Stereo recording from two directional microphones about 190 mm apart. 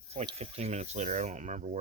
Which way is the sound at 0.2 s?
35° right (ahead or behind).